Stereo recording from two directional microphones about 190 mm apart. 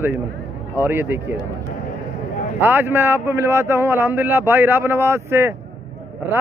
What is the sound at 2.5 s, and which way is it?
Speech, 10° right (ahead or behind).